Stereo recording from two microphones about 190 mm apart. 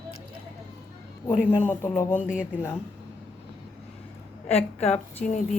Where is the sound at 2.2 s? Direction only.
5° right (ahead or behind).